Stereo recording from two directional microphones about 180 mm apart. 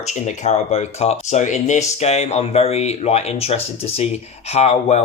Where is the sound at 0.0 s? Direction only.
40° left (ahead or behind).